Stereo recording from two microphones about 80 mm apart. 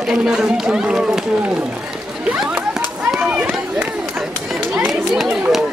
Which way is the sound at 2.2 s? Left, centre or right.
Centre.